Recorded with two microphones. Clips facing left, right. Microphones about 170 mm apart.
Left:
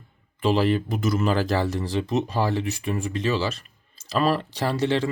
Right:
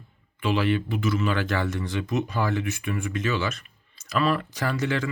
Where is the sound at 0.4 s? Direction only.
35° left (ahead or behind).